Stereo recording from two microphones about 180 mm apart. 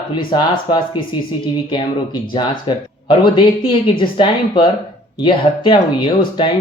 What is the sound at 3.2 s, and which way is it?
Speech, 25° left (ahead or behind).